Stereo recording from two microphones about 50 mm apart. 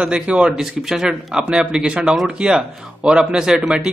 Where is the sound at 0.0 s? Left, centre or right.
Right.